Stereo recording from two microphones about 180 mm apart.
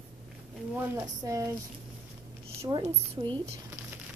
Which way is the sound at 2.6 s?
25° right (ahead or behind).